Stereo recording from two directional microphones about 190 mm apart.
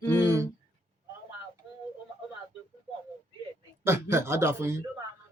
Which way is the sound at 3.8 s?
15° right (ahead or behind).